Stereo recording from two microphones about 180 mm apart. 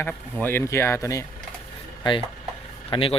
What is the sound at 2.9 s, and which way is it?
Speech, 30° left (ahead or behind).